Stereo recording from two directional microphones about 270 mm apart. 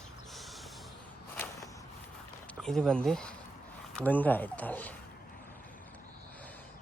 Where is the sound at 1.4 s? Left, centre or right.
Centre.